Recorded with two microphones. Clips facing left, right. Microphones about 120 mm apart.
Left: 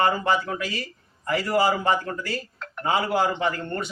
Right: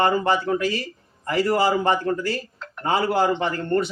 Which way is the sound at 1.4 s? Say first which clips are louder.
Right 3 dB; 30° right (ahead or behind).